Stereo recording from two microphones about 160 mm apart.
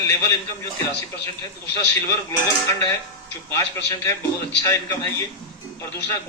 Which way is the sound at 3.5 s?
15° left (ahead or behind).